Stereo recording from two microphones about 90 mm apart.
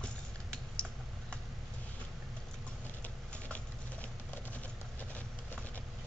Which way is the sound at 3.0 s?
15° left (ahead or behind).